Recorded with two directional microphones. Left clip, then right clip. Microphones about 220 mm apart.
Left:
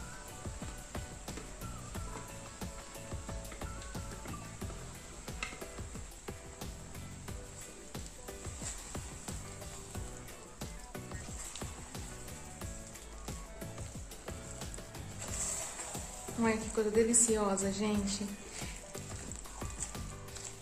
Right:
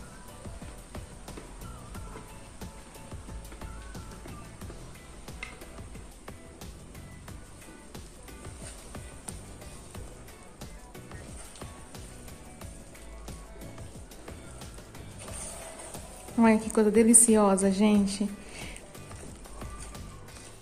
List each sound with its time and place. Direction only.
16.3 s a woman's voice: 35° right (ahead or behind)